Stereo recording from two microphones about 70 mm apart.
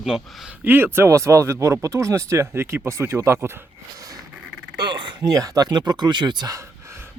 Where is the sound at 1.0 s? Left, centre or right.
Right.